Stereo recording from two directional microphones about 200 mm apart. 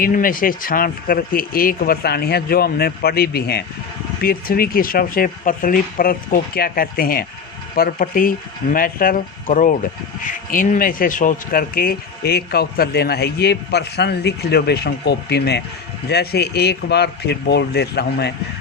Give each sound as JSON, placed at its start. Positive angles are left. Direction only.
{"t": 0.0, "sound": "speech", "side_deg": 45}